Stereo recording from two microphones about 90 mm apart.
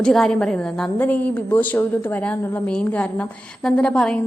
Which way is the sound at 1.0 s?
20° left (ahead or behind).